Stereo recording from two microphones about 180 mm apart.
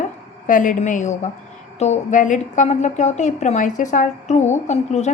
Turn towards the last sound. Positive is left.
turn(degrees=40)  # may be behind; listen again after turning